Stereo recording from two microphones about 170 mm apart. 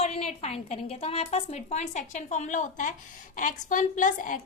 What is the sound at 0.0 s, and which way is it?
A woman's voice, 40° left (ahead or behind).